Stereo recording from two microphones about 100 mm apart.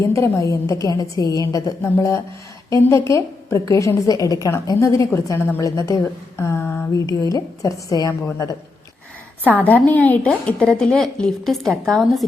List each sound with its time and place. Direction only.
0.0 s a woman's voice: 30° left (ahead or behind)
6.9 s a woman's voice: 40° left (ahead or behind)
9.4 s a woman's voice: 20° right (ahead or behind)
9.6 s a woman's voice: 15° left (ahead or behind)